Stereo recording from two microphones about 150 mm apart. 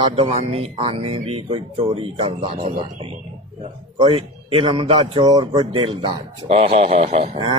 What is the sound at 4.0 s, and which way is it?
Speech, 35° right (ahead or behind).